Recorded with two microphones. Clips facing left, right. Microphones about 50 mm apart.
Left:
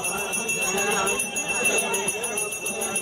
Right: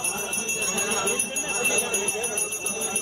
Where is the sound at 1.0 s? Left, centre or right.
Centre.